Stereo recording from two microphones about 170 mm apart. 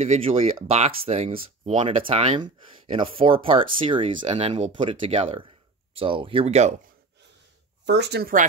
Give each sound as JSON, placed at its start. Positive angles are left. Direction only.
{"t": 0.0, "sound": "speech", "side_deg": -35}
{"t": 7.8, "sound": "speech", "side_deg": -85}